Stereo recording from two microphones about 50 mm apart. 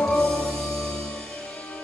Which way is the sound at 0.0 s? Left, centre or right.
Centre.